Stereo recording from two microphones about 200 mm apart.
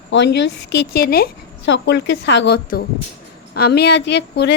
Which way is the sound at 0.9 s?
50° left (ahead or behind).